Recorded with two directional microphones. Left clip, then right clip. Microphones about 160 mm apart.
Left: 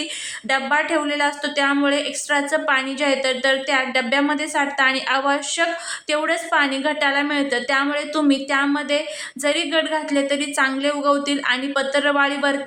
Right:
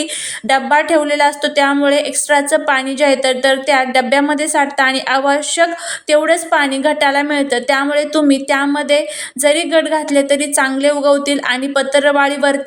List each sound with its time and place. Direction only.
0.4 s a woman's voice: 25° right (ahead or behind)